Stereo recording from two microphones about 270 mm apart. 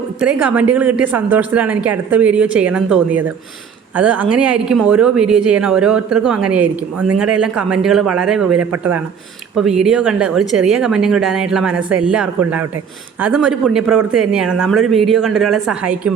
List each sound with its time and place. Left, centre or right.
0.2 s a woman's voice: centre